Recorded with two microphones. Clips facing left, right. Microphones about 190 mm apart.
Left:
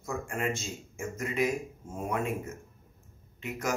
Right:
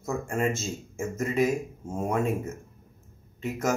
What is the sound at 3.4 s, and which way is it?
Speech, 45° right (ahead or behind).